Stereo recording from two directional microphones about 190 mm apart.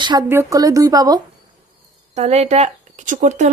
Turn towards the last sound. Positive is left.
turn(degrees=-40)  # may be behind; listen again after turning